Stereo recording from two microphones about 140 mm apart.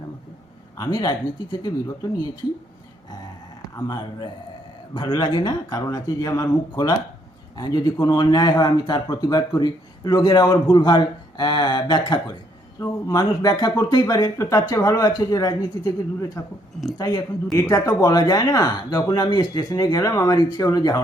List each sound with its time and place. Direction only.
0.8 s speech: 25° left (ahead or behind)
3.8 s a man's voice: 25° left (ahead or behind)
17.0 s speech: 25° left (ahead or behind)